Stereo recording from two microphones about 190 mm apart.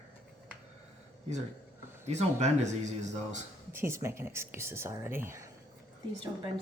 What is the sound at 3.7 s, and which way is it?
A woman's voice, 15° right (ahead or behind).